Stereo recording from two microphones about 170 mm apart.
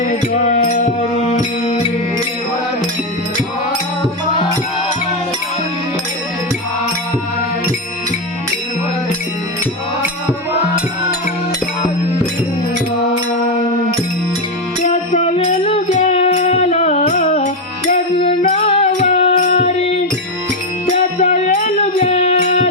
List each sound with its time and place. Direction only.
0.0 s music: 45° left (ahead or behind)
14.8 s music: 40° left (ahead or behind)
21.2 s music: 45° left (ahead or behind)